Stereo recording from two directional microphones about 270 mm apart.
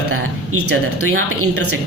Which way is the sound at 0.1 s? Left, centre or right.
Right.